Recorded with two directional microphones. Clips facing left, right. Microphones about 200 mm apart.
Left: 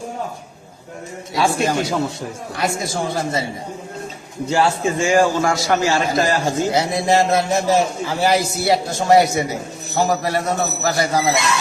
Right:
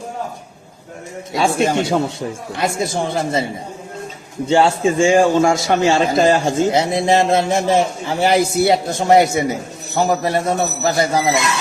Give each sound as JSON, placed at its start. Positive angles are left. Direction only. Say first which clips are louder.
{"t": 1.3, "sound": "a man's voice", "louder": "right 2 dB", "side_deg": -25}
{"t": 4.4, "sound": "a man's voice", "louder": "right 4 dB", "side_deg": -25}